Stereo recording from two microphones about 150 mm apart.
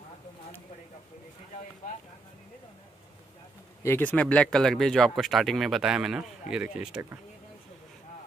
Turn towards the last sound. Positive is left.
turn(degrees=-5)  # may be behind; listen again after turning